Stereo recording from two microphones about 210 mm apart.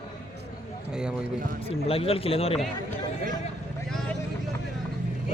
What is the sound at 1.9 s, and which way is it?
Speech, 25° left (ahead or behind).